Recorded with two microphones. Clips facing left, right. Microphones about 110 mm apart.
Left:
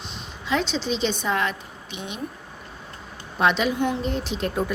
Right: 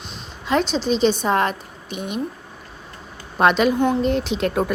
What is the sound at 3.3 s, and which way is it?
Speech, 50° right (ahead or behind).